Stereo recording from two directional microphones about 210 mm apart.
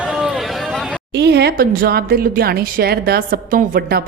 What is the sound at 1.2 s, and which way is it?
A woman's voice, 50° right (ahead or behind).